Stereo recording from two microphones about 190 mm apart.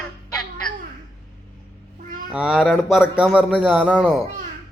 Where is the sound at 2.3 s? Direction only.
Centre (ahead or behind).